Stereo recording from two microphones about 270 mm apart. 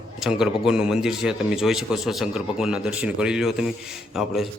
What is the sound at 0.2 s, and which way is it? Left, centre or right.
A man's voice, centre.